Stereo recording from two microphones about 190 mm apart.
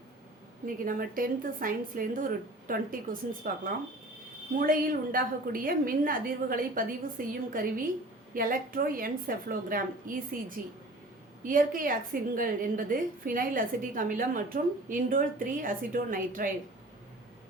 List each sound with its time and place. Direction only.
0.9 s a woman's voice: 50° right (ahead or behind)